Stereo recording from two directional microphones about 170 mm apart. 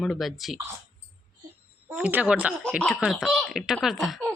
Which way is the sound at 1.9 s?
10° right (ahead or behind).